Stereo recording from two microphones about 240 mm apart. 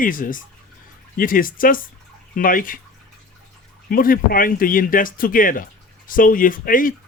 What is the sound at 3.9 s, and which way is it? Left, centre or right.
Speech, left.